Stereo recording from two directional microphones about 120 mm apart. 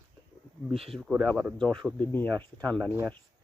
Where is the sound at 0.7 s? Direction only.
55° right (ahead or behind).